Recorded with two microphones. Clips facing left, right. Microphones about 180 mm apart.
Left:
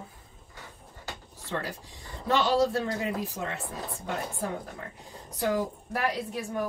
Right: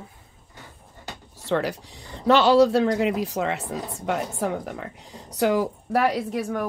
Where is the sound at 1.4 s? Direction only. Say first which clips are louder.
Right 10 dB; 75° right (ahead or behind).